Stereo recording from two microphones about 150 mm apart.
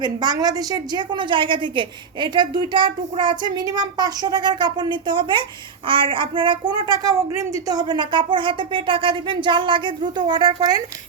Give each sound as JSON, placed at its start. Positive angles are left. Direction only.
{"t": 0.0, "sound": "a woman's voice", "side_deg": -25}